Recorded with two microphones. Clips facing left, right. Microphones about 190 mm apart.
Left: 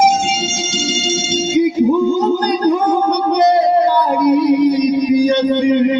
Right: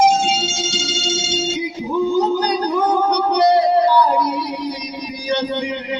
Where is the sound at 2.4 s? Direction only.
50° left (ahead or behind).